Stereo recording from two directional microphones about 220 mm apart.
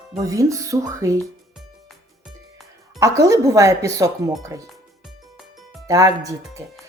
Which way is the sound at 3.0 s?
15° right (ahead or behind).